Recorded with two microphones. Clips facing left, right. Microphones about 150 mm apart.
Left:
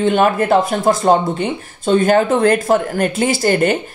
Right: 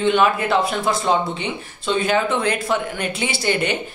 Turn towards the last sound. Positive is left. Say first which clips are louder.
# left 7 dB
turn(degrees=45)  # may be behind; listen again after turning